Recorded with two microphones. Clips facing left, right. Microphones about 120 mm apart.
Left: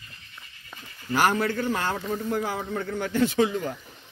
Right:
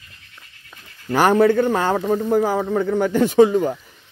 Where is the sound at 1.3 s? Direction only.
60° right (ahead or behind).